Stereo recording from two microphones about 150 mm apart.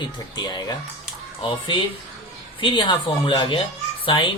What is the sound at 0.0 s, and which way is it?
Speech, 30° left (ahead or behind).